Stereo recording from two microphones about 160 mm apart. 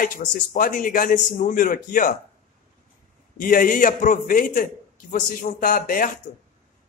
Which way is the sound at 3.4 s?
55° left (ahead or behind).